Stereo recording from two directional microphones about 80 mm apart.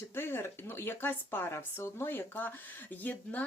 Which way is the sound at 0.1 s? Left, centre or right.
Left.